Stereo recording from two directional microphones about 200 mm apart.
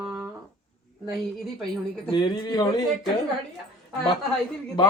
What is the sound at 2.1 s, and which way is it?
Speech, 20° left (ahead or behind).